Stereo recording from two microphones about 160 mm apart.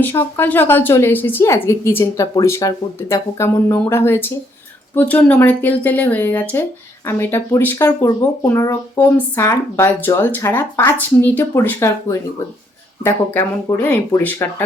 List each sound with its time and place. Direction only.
0.0 s speech: 10° left (ahead or behind)